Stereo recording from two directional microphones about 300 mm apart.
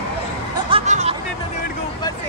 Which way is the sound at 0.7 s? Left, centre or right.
Centre.